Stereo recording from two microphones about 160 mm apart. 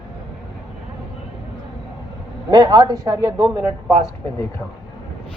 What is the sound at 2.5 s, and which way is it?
Speech, 25° right (ahead or behind).